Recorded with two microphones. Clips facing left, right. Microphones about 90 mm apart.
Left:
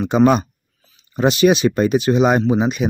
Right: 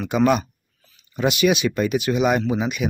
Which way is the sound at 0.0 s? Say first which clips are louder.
Left 4 dB; 30° left (ahead or behind).